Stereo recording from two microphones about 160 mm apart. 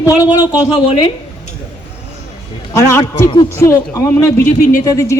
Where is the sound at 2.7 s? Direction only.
20° left (ahead or behind).